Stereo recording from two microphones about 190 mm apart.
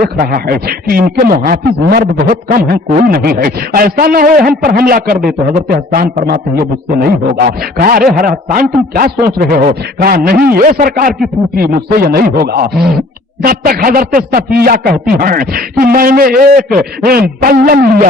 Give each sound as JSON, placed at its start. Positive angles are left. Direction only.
{"t": 0.0, "sound": "a man's voice", "side_deg": -50}